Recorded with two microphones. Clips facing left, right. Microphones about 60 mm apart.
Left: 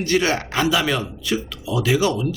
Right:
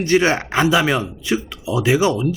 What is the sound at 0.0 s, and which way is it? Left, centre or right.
Speech, right.